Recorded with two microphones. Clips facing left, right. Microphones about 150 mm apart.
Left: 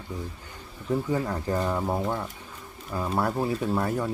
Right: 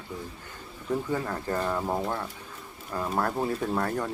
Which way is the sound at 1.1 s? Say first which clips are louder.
Left 2 dB; 15° left (ahead or behind).